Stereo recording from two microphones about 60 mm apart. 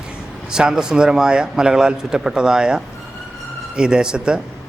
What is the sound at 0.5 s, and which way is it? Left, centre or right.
Speech, centre.